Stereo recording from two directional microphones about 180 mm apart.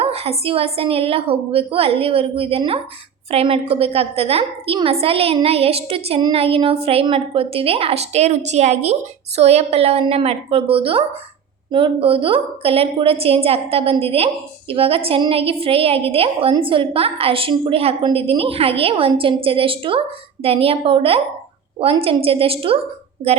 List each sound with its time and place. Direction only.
0.0 s a woman's voice: 35° right (ahead or behind)